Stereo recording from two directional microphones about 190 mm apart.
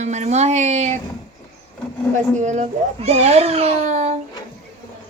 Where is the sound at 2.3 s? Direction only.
40° right (ahead or behind).